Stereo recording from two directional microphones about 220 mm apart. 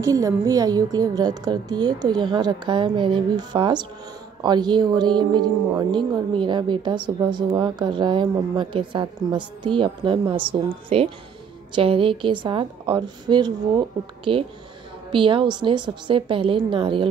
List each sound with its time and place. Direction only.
0.0 s a woman's voice: 15° right (ahead or behind)